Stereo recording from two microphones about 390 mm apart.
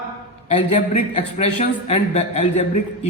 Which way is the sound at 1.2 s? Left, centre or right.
Centre.